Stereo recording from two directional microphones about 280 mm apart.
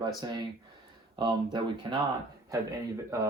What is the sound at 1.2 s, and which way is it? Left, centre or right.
Speech, centre.